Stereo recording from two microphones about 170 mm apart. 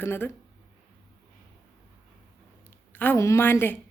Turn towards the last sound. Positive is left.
turn(degrees=10)  # may be behind; listen again after turning